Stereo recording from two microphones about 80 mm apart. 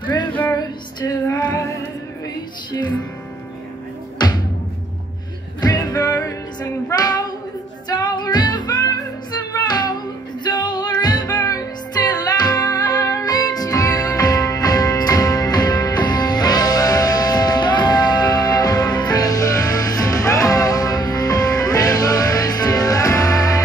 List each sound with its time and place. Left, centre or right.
0.0 s music: left
0.5 s music: left
4.2 s music: left
5.6 s music: left
7.9 s music: left